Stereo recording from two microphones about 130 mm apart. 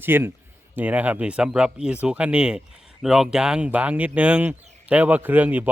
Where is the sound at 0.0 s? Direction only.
15° right (ahead or behind).